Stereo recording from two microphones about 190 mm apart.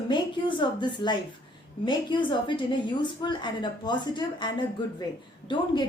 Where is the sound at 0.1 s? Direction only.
25° left (ahead or behind).